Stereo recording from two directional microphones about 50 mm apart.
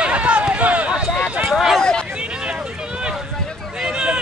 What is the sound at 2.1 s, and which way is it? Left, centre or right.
Boat, right.